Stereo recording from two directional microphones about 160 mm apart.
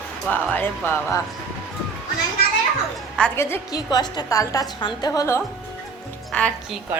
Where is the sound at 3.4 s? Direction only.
20° left (ahead or behind).